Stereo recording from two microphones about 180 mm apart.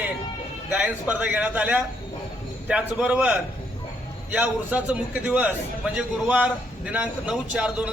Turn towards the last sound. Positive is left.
turn(degrees=-5)  # may be behind; listen again after turning